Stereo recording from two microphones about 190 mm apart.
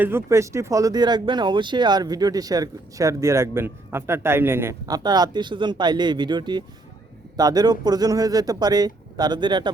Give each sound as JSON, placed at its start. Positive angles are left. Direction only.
{"t": 0.0, "sound": "speech", "side_deg": -10}